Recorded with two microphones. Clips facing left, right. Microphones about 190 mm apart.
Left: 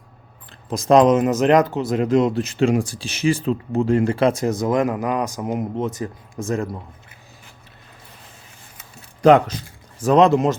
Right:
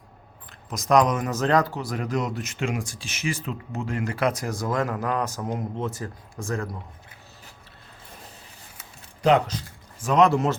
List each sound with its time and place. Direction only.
0.7 s speech: 30° left (ahead or behind)
9.2 s speech: 50° left (ahead or behind)
10.0 s speech: 30° left (ahead or behind)